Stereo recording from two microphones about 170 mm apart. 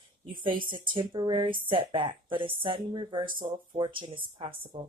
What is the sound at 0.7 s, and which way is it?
Speech, 30° right (ahead or behind).